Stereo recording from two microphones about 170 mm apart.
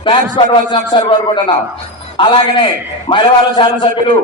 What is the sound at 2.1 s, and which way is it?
A man's voice, 30° left (ahead or behind).